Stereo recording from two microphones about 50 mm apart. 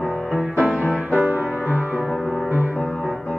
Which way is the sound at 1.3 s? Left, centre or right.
Right.